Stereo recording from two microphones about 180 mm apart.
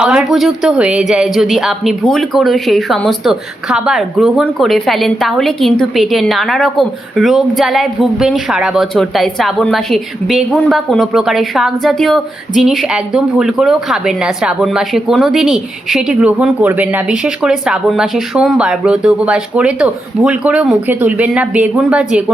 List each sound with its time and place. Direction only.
0.0 s a woman's voice: 5° right (ahead or behind)